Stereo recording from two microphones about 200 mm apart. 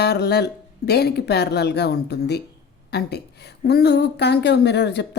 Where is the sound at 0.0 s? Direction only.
55° left (ahead or behind).